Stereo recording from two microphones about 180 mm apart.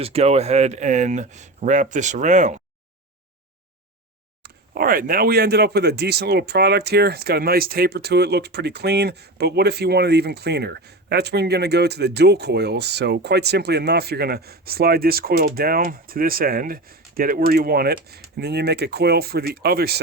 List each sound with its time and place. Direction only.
0.0 s speech: 35° right (ahead or behind)
4.4 s speech: 55° right (ahead or behind)